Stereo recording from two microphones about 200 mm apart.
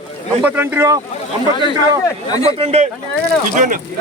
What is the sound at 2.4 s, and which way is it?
Speech, 30° right (ahead or behind).